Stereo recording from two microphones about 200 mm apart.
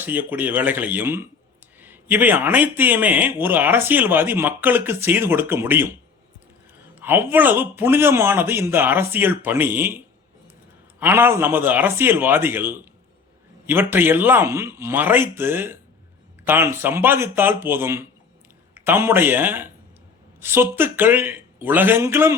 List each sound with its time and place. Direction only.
0.0 s a man's voice: 10° right (ahead or behind)
6.9 s a man's voice: 10° right (ahead or behind)
11.0 s a man's voice: 10° right (ahead or behind)